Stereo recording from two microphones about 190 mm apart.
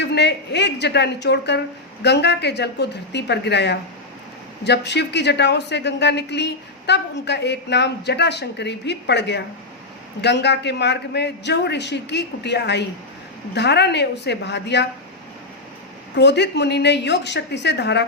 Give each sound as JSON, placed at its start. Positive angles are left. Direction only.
{"t": 0.0, "sound": "speech", "side_deg": 65}
{"t": 16.1, "sound": "speech", "side_deg": 65}